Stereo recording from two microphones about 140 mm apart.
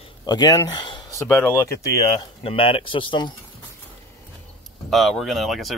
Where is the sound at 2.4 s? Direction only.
40° left (ahead or behind).